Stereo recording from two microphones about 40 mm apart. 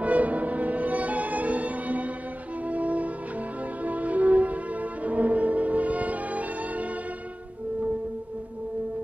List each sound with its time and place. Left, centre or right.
0.0 s music: right